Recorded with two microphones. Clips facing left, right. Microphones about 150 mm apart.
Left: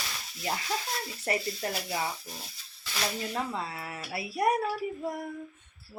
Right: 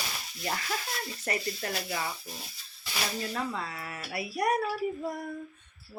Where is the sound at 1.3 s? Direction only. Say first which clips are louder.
Left 2 dB; 25° left (ahead or behind).